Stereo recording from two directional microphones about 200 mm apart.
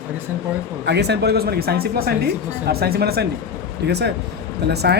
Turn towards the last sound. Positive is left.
turn(degrees=-55)  # may be behind; listen again after turning